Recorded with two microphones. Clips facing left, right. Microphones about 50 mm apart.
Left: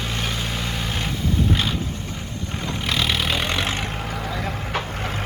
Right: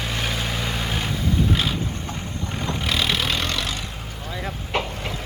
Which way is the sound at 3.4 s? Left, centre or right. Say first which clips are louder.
Left 3 dB; left.